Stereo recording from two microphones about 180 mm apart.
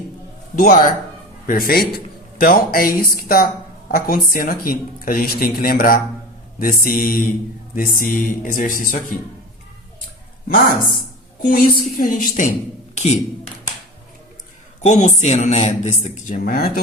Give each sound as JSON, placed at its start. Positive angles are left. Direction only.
{"t": 0.6, "sound": "a man's voice", "side_deg": 50}
{"t": 11.4, "sound": "speech", "side_deg": 50}
{"t": 12.9, "sound": "speech", "side_deg": 40}
{"t": 14.8, "sound": "a man's voice", "side_deg": 40}
{"t": 16.4, "sound": "a man's voice", "side_deg": 55}